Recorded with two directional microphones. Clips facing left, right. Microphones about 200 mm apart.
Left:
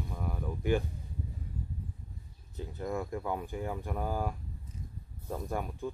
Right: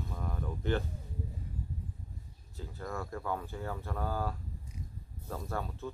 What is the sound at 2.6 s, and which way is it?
Speech, 20° left (ahead or behind).